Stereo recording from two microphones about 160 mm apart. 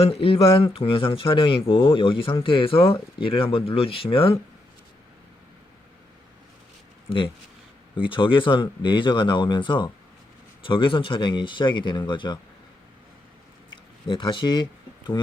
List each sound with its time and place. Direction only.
0.0 s speech: 35° left (ahead or behind)
7.9 s speech: 30° left (ahead or behind)
14.1 s speech: 30° left (ahead or behind)